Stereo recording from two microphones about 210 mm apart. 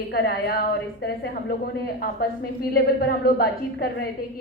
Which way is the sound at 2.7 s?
45° left (ahead or behind).